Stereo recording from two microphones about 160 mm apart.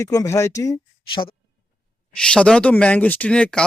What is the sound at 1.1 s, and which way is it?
Speech, 30° left (ahead or behind).